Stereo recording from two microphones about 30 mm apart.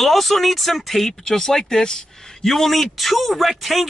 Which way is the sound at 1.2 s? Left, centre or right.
Centre.